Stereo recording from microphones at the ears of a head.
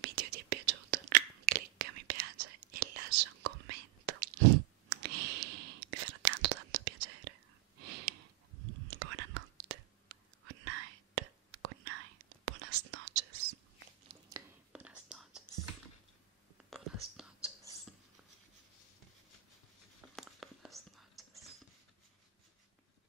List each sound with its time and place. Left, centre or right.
0.0 s whispering: right
20.2 s whispering: centre